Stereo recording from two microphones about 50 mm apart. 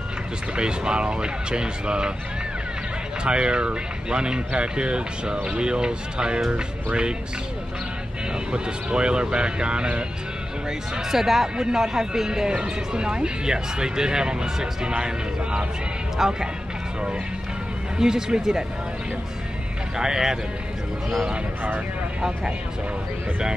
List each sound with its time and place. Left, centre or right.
0.6 s speech: centre
3.3 s speech: centre
8.5 s speech: centre
11.1 s speech: centre
17.9 s speech: centre
20.0 s speech: centre